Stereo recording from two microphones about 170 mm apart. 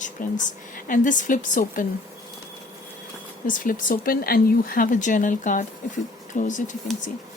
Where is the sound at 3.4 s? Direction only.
50° left (ahead or behind).